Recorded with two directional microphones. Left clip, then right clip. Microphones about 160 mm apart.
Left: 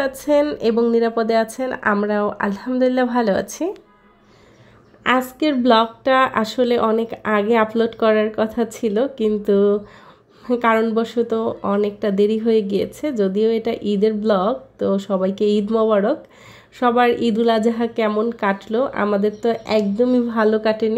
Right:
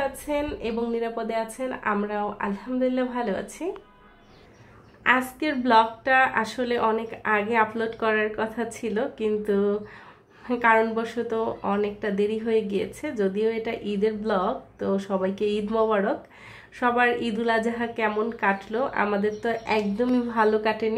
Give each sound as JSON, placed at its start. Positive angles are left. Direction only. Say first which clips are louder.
{"t": 0.2, "sound": "speech", "louder": "left 11 dB", "side_deg": 50}
{"t": 5.0, "sound": "speech", "louder": "left 4 dB", "side_deg": 40}
{"t": 10.8, "sound": "speech", "louder": "left 6 dB", "side_deg": 35}